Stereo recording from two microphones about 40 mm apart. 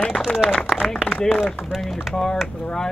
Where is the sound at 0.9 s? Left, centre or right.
Centre.